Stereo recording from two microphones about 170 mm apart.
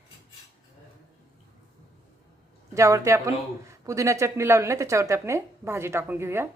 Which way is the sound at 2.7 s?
20° right (ahead or behind).